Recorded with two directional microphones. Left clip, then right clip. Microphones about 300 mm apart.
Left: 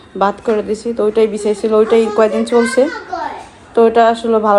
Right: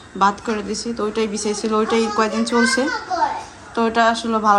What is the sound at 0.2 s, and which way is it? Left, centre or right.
Speech, centre.